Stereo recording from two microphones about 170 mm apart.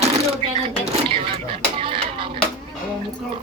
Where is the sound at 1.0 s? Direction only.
30° right (ahead or behind).